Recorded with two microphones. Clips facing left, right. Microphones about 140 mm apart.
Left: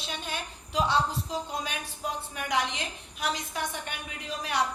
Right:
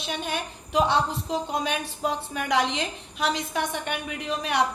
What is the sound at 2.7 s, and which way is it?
A woman's voice, 90° right.